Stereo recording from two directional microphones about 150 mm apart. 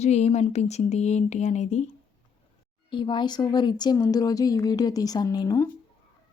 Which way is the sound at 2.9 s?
30° left (ahead or behind).